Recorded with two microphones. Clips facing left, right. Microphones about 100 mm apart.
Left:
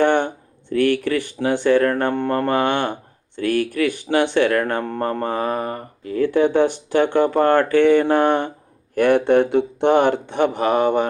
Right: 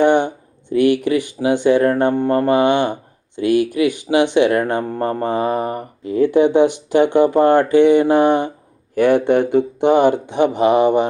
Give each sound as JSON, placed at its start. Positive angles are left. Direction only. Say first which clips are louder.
{"t": 0.0, "sound": "a sound", "louder": "right 3 dB", "side_deg": -15}
{"t": 0.7, "sound": "speech", "louder": "right 3 dB", "side_deg": -15}
{"t": 9.9, "sound": "speech", "louder": "right 3 dB", "side_deg": 55}
{"t": 10.2, "sound": "speech", "louder": "right 4 dB", "side_deg": -15}